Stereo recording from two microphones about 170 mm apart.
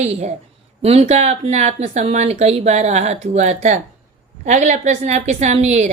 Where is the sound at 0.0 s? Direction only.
40° right (ahead or behind).